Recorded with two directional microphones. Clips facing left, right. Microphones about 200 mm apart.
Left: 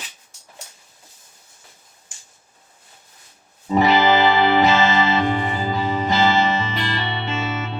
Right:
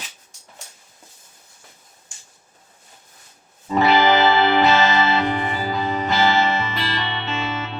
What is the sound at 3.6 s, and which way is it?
Music, 15° left (ahead or behind).